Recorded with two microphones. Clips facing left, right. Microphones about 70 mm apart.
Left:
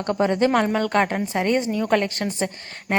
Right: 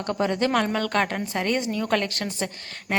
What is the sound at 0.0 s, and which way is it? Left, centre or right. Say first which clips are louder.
A woman's voice: left 4 dB; left.